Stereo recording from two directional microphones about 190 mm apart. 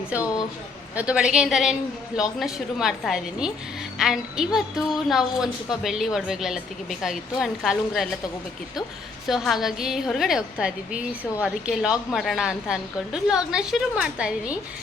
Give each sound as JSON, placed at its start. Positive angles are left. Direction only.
{"t": 0.2, "sound": "speech", "side_deg": 20}
{"t": 0.9, "sound": "a woman's voice", "side_deg": -5}
{"t": 9.2, "sound": "a woman's voice", "side_deg": 0}